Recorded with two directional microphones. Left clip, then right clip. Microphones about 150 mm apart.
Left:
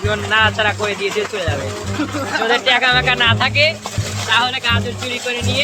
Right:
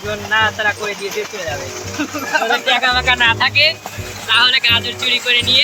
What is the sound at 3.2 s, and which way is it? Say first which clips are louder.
Speech: right 2 dB; 70° left (ahead or behind).